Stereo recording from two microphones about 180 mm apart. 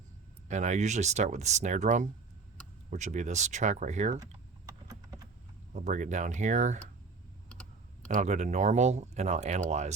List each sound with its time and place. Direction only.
0.4 s speech: 40° right (ahead or behind)
4.2 s typing: 20° right (ahead or behind)
5.7 s speech: 45° right (ahead or behind)
8.0 s speech: 40° right (ahead or behind)